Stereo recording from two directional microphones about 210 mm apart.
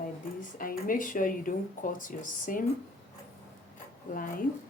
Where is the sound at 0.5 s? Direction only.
40° left (ahead or behind).